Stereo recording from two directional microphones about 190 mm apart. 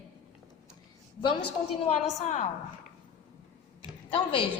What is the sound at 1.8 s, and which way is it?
Speech, 35° left (ahead or behind).